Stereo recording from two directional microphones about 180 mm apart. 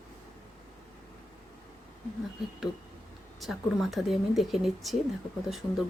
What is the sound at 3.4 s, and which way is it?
A woman's voice, centre (ahead or behind).